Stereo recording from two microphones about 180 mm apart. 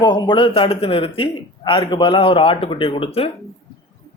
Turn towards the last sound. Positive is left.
turn(degrees=30)  # may be behind; listen again after turning